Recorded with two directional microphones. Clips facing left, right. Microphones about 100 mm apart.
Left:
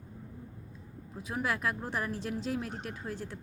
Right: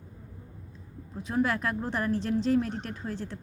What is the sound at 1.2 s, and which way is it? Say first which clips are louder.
A woman's voice: right 5 dB; 5° left (ahead or behind).